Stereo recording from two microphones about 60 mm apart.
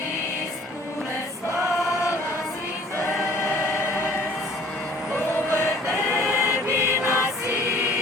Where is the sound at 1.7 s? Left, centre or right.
Left.